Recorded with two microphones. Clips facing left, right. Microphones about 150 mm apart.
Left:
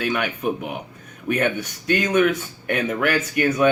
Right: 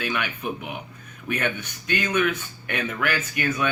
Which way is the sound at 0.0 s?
45° left (ahead or behind).